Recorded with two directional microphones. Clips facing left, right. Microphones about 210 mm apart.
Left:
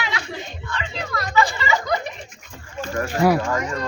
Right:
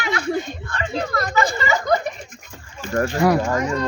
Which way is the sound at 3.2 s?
5° left (ahead or behind).